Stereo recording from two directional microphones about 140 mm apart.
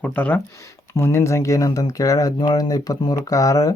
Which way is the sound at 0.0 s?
10° left (ahead or behind).